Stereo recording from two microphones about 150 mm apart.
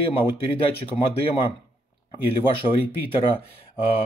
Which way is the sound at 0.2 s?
35° left (ahead or behind).